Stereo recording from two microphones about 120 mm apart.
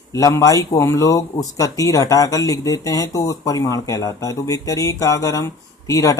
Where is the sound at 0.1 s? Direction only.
25° left (ahead or behind).